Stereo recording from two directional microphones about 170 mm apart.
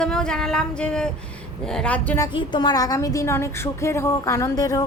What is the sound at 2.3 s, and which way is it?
Speech, 25° left (ahead or behind).